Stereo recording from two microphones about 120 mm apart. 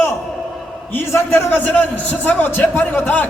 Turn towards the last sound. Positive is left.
turn(degrees=15)  # may be behind; listen again after turning